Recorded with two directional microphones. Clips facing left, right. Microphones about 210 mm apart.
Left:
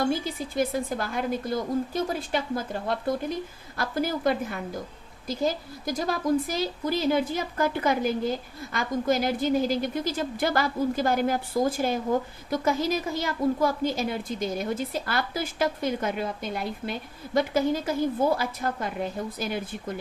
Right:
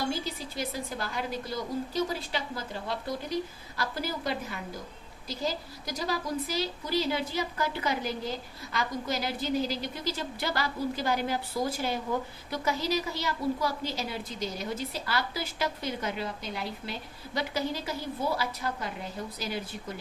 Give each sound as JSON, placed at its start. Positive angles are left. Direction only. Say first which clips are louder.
{"t": 0.1, "sound": "a woman's voice", "louder": "left 5 dB", "side_deg": 50}